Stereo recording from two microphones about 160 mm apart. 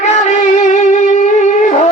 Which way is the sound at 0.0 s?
45° left (ahead or behind).